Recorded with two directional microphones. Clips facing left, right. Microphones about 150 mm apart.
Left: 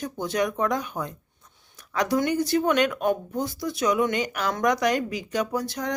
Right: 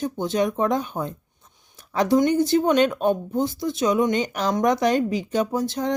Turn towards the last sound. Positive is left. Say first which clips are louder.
# right 4 dB
turn(degrees=-25)  # may be behind; listen again after turning